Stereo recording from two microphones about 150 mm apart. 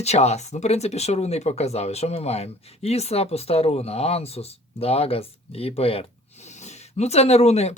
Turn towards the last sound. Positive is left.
turn(degrees=45)  # may be behind; listen again after turning